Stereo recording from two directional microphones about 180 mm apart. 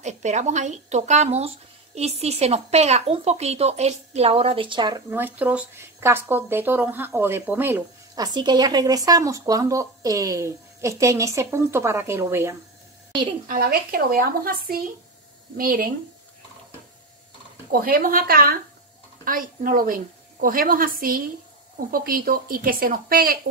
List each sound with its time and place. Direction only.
0.0 s speech: 40° right (ahead or behind); by 5.0 s 25° right (ahead or behind)
5.1 s speech: 10° right (ahead or behind)
13.5 s a woman's voice: 55° right (ahead or behind)
17.6 s a woman's voice: 55° right (ahead or behind)